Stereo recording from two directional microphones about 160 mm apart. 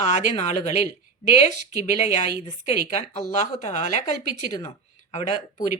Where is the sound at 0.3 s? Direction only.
45° left (ahead or behind).